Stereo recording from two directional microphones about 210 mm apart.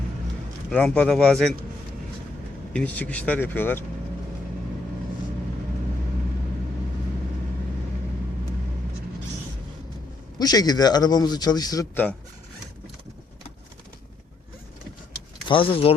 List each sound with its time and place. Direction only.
0.7 s speech: 5° left (ahead or behind)
2.7 s speech: 5° left (ahead or behind)
10.3 s a man's voice: 20° left (ahead or behind)
15.4 s a man's voice: 25° left (ahead or behind)